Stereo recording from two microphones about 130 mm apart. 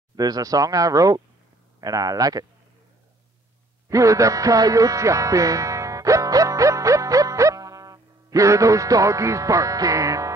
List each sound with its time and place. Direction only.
0.1 s speech: 30° right (ahead or behind)
3.9 s music: 25° right (ahead or behind)